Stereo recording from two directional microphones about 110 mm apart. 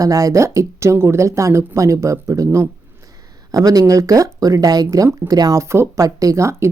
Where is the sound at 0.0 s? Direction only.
30° right (ahead or behind).